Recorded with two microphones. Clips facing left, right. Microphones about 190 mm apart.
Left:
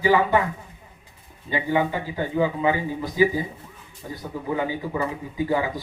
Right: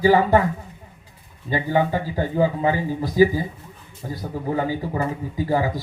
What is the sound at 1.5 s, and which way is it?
A man's voice, 40° right (ahead or behind).